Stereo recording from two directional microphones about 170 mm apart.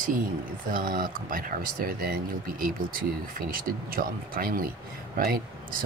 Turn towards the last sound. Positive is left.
turn(degrees=-60)  # may be behind; listen again after turning